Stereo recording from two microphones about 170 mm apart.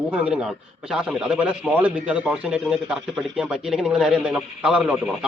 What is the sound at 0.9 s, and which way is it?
A man's voice, 5° right (ahead or behind).